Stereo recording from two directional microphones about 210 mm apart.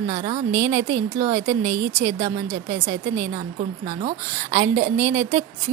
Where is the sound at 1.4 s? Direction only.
15° right (ahead or behind).